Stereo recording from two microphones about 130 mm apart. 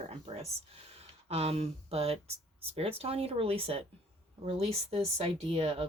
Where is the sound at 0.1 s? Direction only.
55° right (ahead or behind).